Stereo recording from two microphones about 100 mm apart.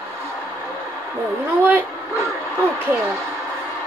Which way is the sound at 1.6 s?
20° right (ahead or behind).